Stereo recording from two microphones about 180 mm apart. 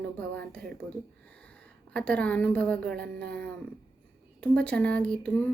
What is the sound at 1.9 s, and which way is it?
Speech, 5° left (ahead or behind).